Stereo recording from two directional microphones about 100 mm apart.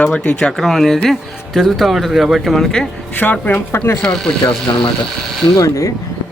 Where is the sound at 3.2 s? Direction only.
15° left (ahead or behind).